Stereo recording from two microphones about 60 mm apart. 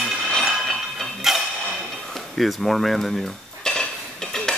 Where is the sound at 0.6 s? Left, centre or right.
Centre.